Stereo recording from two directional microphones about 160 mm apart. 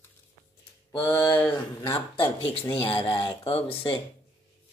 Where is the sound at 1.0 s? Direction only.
10° left (ahead or behind).